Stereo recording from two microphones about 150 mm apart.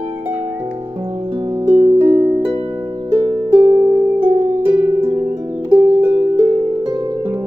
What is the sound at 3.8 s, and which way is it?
Harp, 30° right (ahead or behind).